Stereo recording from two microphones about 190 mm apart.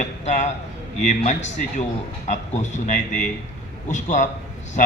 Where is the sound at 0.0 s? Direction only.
40° left (ahead or behind).